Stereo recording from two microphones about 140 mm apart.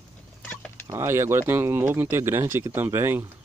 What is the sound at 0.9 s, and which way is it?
Speech, 20° right (ahead or behind).